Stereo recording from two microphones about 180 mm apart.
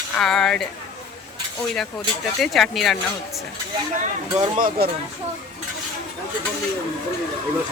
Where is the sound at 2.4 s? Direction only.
Centre (ahead or behind).